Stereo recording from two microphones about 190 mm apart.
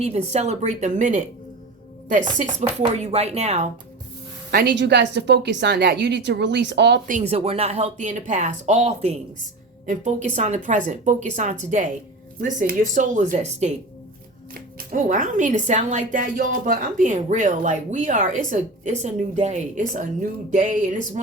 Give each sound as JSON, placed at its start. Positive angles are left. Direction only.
{"t": 0.0, "sound": "speech", "side_deg": -35}
{"t": 2.4, "sound": "speech", "side_deg": -35}
{"t": 4.5, "sound": "a woman's voice", "side_deg": -65}
{"t": 7.1, "sound": "speech", "side_deg": -35}
{"t": 14.8, "sound": "speech", "side_deg": -40}